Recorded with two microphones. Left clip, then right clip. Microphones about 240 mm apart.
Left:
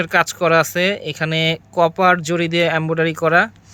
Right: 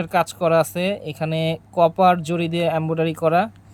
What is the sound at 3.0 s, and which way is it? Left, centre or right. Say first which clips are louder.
Speech: left 4 dB; centre.